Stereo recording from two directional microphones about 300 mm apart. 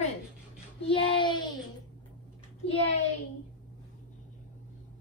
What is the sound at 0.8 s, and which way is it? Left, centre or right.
Child singing, centre.